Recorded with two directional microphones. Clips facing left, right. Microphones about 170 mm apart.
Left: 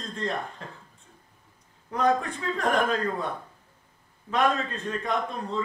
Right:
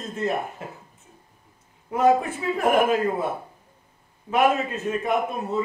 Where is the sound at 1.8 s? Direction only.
10° right (ahead or behind).